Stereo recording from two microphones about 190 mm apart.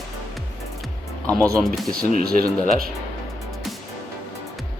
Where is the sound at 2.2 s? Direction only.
50° right (ahead or behind).